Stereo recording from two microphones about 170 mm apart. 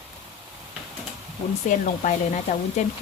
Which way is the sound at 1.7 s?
45° left (ahead or behind).